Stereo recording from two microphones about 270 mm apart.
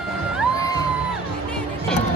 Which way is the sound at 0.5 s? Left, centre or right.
Centre.